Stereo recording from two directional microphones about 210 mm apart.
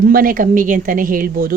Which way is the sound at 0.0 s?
45° right (ahead or behind).